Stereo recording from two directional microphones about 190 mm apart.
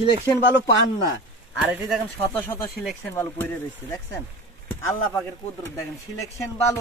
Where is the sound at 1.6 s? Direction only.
5° right (ahead or behind).